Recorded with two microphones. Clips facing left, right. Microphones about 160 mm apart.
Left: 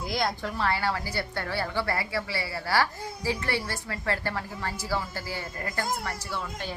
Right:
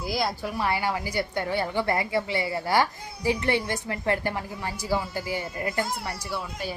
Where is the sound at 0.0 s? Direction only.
5° right (ahead or behind).